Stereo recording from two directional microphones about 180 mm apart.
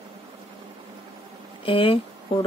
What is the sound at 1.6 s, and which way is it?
Speech, 30° left (ahead or behind).